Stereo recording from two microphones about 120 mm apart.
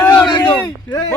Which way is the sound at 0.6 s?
30° left (ahead or behind).